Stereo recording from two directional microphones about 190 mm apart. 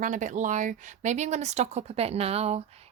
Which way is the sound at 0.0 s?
40° right (ahead or behind).